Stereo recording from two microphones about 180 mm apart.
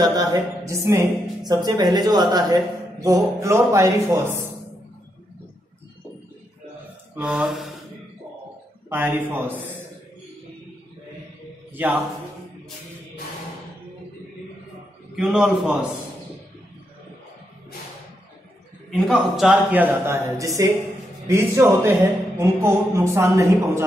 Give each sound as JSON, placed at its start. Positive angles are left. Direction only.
{"t": 0.0, "sound": "speech", "side_deg": -20}
{"t": 7.2, "sound": "a man's voice", "side_deg": -5}
{"t": 8.8, "sound": "speech", "side_deg": -10}
{"t": 11.7, "sound": "a man's voice", "side_deg": -10}
{"t": 15.1, "sound": "a man's voice", "side_deg": -5}
{"t": 18.9, "sound": "speech", "side_deg": 0}